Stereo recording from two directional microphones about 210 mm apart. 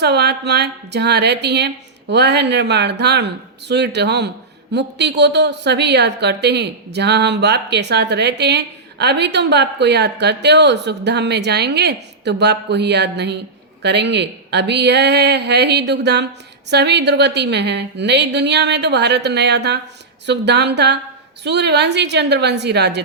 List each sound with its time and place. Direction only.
0.0 s a woman's voice: 50° right (ahead or behind)